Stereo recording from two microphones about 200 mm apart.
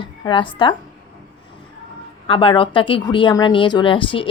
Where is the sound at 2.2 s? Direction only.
25° left (ahead or behind).